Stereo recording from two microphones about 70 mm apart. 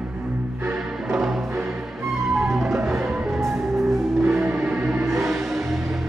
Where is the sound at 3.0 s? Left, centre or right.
Centre.